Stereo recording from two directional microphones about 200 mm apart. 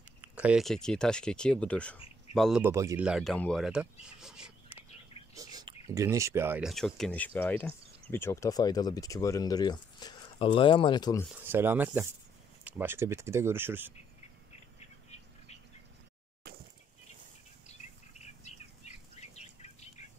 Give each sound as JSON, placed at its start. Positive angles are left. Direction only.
{"t": 0.2, "sound": "speech", "side_deg": -5}
{"t": 2.6, "sound": "speech", "side_deg": -15}
{"t": 3.1, "sound": "speech", "side_deg": 0}
{"t": 4.2, "sound": "a sound", "side_deg": -5}
{"t": 5.3, "sound": "bird", "side_deg": -20}
{"t": 5.9, "sound": "speech", "side_deg": -15}
{"t": 6.7, "sound": "speech", "side_deg": 0}
{"t": 11.4, "sound": "speech", "side_deg": -10}
{"t": 16.5, "sound": "a sound", "side_deg": -50}
{"t": 19.1, "sound": "bird", "side_deg": 35}